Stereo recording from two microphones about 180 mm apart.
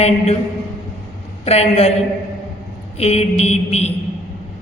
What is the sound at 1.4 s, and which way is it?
Speech, 35° left (ahead or behind).